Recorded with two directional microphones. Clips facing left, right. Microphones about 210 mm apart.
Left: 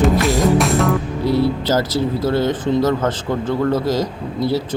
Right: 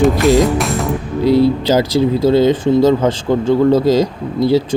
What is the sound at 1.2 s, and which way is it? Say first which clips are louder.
Speech: right 7 dB; 15° right (ahead or behind).